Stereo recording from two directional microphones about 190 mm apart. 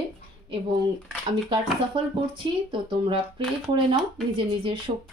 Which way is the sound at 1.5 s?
25° right (ahead or behind).